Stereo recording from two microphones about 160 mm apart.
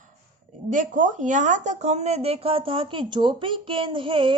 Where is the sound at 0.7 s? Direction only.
50° right (ahead or behind).